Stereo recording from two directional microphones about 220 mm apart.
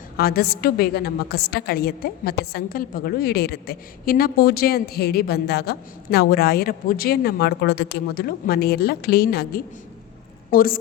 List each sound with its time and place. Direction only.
0.2 s a woman's voice: 45° left (ahead or behind)